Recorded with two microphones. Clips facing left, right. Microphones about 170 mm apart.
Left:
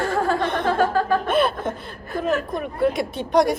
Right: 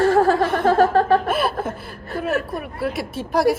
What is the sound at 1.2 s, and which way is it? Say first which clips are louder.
Laughter: left 1 dB; 5° right (ahead or behind).